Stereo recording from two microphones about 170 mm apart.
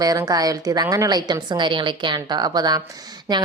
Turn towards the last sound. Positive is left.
turn(degrees=-25)  # may be behind; listen again after turning